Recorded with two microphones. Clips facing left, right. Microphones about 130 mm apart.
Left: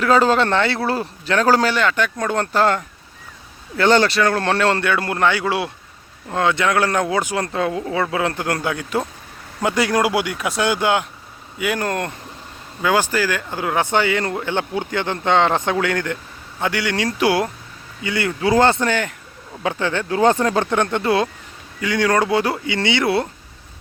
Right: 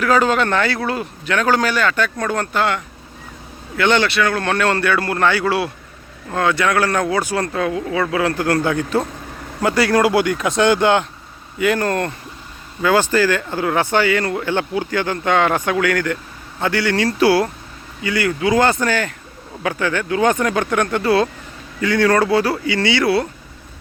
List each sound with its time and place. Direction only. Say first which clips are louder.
0.0 s speech: left 1 dB; 30° left (ahead or behind)